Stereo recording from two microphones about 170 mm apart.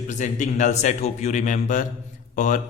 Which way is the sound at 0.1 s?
45° left (ahead or behind).